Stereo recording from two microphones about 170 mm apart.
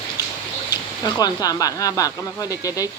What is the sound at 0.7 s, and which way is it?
Speech, 25° left (ahead or behind).